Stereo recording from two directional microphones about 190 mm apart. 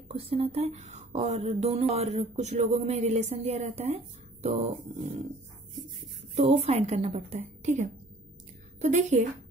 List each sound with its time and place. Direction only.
0.1 s speech: 30° right (ahead or behind)
6.3 s speech: 40° right (ahead or behind)